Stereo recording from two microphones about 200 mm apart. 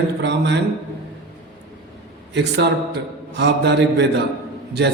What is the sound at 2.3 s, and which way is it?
A man's voice, 60° right (ahead or behind).